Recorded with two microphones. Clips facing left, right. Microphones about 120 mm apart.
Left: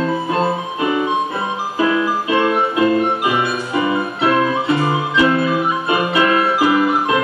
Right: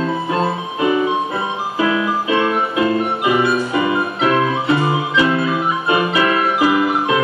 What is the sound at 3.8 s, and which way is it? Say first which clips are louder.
Music: even; 15° right (ahead or behind).